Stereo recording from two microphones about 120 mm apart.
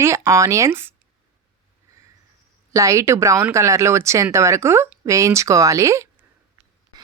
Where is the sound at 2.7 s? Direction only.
25° right (ahead or behind).